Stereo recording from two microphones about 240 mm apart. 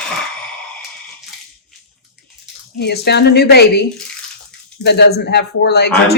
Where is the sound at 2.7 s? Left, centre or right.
Left.